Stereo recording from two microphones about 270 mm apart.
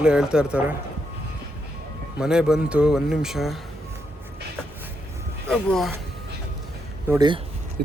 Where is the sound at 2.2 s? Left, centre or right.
Centre.